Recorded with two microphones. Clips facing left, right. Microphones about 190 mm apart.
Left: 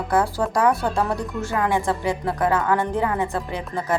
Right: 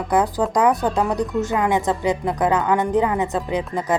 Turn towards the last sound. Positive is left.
turn(degrees=-15)  # may be behind; listen again after turning